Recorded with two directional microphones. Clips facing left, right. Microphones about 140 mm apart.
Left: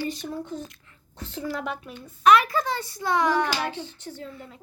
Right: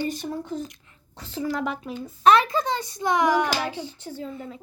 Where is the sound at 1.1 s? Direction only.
90° right.